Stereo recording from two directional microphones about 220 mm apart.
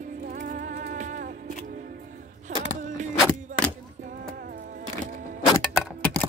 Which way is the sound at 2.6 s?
35° right (ahead or behind).